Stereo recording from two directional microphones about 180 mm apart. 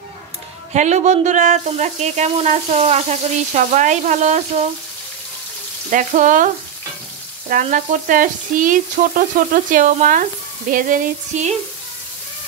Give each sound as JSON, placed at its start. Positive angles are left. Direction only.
{"t": 0.7, "sound": "frying", "side_deg": -40}
{"t": 5.9, "sound": "frying", "side_deg": -45}
{"t": 7.6, "sound": "frying", "side_deg": -45}